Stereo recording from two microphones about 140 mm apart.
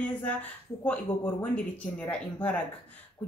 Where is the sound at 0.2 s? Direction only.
10° left (ahead or behind).